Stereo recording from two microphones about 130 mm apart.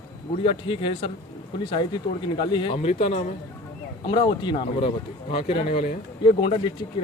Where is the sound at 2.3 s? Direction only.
40° left (ahead or behind).